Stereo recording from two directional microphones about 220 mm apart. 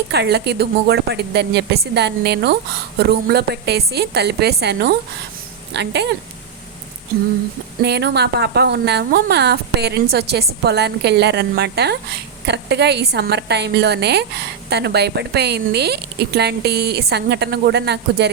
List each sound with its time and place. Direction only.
0.1 s a woman's voice: 50° right (ahead or behind)
7.8 s a woman's voice: 50° right (ahead or behind)